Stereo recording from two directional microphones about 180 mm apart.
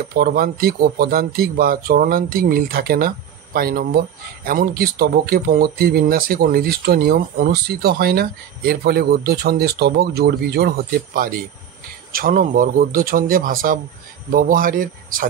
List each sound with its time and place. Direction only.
0.1 s speech: 55° right (ahead or behind)
12.1 s speech: 50° right (ahead or behind)